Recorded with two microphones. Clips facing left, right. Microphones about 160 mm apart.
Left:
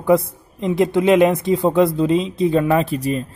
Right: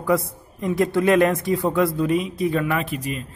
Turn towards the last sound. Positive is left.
turn(degrees=35)  # may be behind; listen again after turning